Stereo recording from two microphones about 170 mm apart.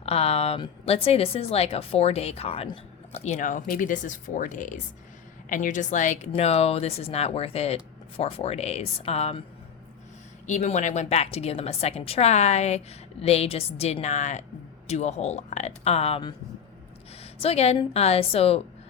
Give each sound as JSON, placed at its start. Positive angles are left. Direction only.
{"t": 0.0, "sound": "a woman's voice", "side_deg": 35}
{"t": 10.4, "sound": "a woman's voice", "side_deg": 45}
{"t": 17.4, "sound": "a woman's voice", "side_deg": 35}